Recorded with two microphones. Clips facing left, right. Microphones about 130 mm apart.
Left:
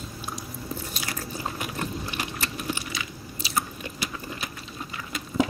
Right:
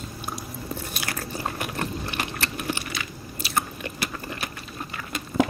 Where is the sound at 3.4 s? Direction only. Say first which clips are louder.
Right 2 dB; 60° right (ahead or behind).